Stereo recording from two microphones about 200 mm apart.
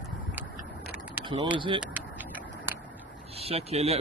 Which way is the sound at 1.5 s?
25° right (ahead or behind).